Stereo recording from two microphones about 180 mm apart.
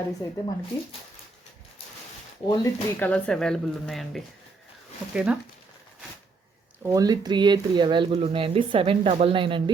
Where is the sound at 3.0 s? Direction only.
5° left (ahead or behind).